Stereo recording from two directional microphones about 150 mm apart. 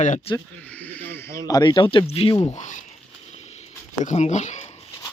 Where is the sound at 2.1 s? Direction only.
40° left (ahead or behind).